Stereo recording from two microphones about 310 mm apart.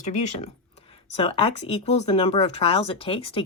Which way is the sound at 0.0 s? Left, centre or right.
Left.